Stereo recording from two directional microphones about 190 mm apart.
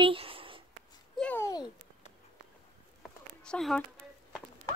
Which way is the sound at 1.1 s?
10° left (ahead or behind).